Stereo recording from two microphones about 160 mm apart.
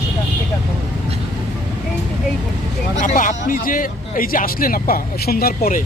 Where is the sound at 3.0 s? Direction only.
55° left (ahead or behind).